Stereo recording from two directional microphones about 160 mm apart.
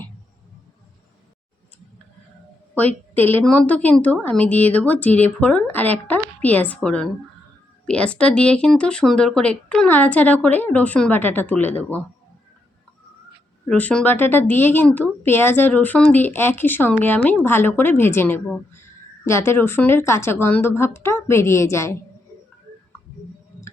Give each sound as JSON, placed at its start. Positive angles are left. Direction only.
{"t": 2.7, "sound": "a woman's voice", "side_deg": 10}
{"t": 13.7, "sound": "a woman's voice", "side_deg": 5}